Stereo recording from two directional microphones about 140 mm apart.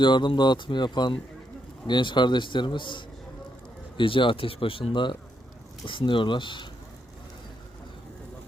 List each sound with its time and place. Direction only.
0.0 s speech: 35° left (ahead or behind)